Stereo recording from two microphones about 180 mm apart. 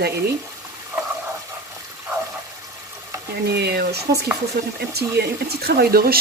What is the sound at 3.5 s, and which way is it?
Speech, 65° right (ahead or behind).